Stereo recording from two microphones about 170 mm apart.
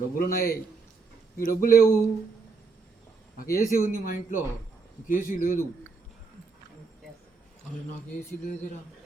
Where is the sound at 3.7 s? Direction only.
55° left (ahead or behind).